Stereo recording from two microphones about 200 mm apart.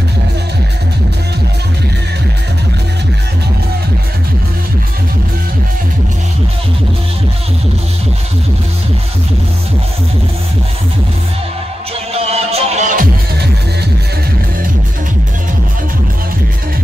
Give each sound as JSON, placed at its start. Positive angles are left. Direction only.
{"t": 12.1, "sound": "music", "side_deg": -30}